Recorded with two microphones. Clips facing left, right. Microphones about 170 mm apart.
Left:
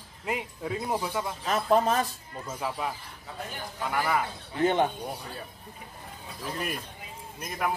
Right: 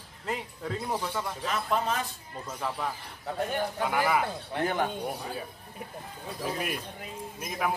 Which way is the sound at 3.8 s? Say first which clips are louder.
Even; 5° right (ahead or behind).